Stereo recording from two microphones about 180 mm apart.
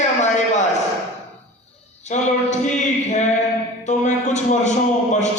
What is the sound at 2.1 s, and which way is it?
Speech, 40° left (ahead or behind).